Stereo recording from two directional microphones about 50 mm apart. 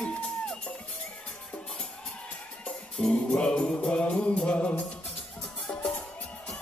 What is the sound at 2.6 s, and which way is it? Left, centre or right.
Music, left.